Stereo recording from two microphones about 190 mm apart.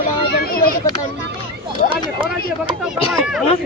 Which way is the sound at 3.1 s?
Centre (ahead or behind).